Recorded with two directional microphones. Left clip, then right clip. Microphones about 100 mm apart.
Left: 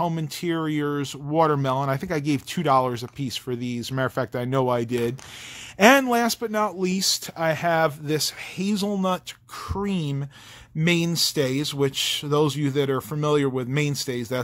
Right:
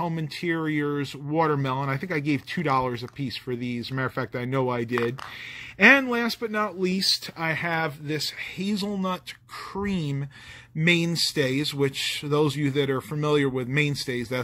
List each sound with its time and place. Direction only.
0.0 s speech: 35° left (ahead or behind)
6.4 s speech: 35° left (ahead or behind)
8.1 s speech: 50° left (ahead or behind)
9.8 s speech: 30° left (ahead or behind)